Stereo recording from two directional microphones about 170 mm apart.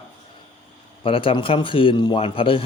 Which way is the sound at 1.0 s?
30° left (ahead or behind).